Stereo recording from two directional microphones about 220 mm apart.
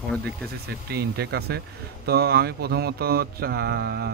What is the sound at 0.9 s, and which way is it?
Speech, 45° right (ahead or behind).